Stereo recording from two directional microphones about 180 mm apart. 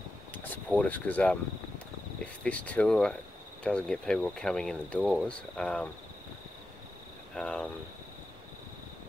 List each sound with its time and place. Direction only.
0.3 s speech: 10° left (ahead or behind)
2.4 s speech: 5° left (ahead or behind)
7.3 s speech: 5° left (ahead or behind)